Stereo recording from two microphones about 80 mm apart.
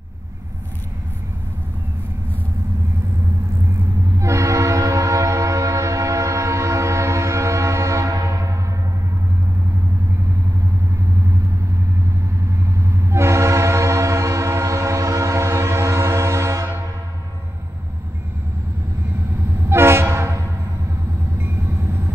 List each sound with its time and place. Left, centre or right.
4.2 s train horn: right
12.4 s train: right
19.7 s train: right
21.4 s train: right